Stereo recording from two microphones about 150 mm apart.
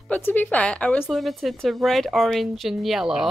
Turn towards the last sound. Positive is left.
turn(degrees=-5)  # may be behind; listen again after turning